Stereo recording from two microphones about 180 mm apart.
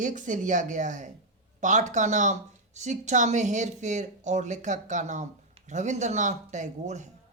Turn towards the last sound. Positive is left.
turn(degrees=-40)  # may be behind; listen again after turning